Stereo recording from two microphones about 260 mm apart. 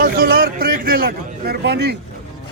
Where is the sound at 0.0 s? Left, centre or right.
Right.